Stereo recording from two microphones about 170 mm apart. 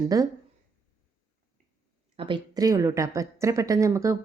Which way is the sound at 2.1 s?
30° right (ahead or behind).